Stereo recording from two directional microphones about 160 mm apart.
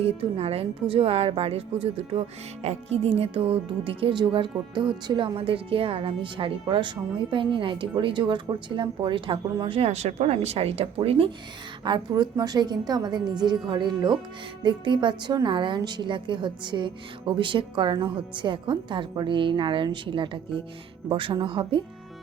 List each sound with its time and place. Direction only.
0.0 s a woman's voice: 40° right (ahead or behind)